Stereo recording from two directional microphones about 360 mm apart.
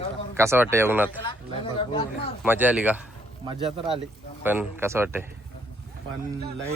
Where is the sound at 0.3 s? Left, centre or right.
Centre.